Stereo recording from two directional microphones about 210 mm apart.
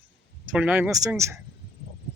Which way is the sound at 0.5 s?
5° right (ahead or behind).